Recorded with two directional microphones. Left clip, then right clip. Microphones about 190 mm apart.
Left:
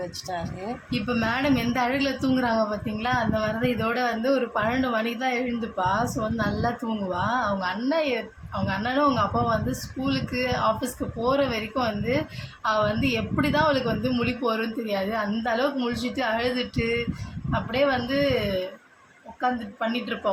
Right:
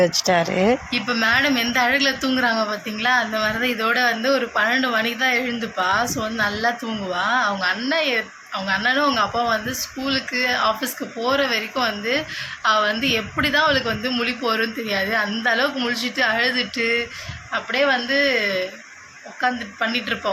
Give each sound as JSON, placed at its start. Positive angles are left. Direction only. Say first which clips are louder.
{"t": 0.0, "sound": "speech", "louder": "right 14 dB", "side_deg": -35}
{"t": 0.9, "sound": "a woman's voice", "louder": "right 7 dB", "side_deg": 5}